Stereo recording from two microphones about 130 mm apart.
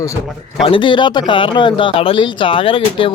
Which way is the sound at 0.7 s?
40° left (ahead or behind).